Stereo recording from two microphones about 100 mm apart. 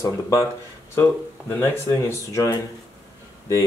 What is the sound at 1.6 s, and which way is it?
Speech, 25° left (ahead or behind).